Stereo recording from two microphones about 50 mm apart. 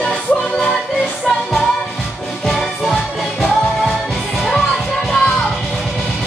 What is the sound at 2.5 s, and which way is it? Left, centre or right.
Music, centre.